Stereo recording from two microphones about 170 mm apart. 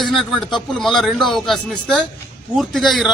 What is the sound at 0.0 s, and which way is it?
A man's voice, centre (ahead or behind).